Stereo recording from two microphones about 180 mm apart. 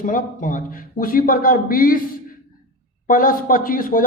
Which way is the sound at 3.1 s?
50° left (ahead or behind).